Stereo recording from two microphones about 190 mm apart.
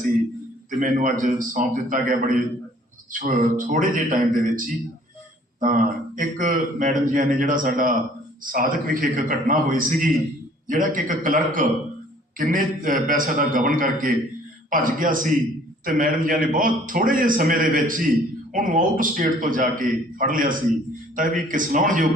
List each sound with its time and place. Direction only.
0.8 s speech: 45° right (ahead or behind)